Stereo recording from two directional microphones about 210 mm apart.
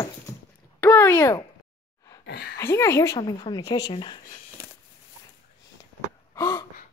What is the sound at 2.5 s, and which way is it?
A woman's voice, 10° left (ahead or behind).